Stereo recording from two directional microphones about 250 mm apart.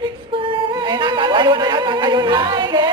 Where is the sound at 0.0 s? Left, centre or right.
Right.